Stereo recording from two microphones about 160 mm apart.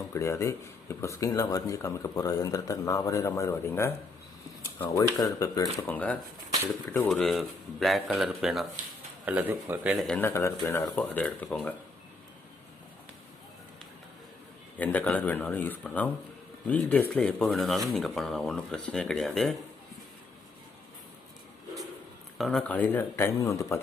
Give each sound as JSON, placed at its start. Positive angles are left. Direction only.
{"t": 0.1, "sound": "speech", "side_deg": 20}
{"t": 5.9, "sound": "speech", "side_deg": 10}
{"t": 10.1, "sound": "speech", "side_deg": 15}
{"t": 14.8, "sound": "speech", "side_deg": 10}
{"t": 22.4, "sound": "speech", "side_deg": 0}